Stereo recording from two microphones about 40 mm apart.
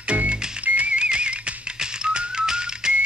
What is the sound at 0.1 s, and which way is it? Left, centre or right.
Music, right.